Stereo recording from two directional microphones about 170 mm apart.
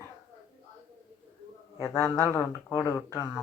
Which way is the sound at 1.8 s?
15° left (ahead or behind).